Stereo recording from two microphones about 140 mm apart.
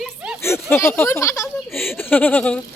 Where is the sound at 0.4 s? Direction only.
20° left (ahead or behind).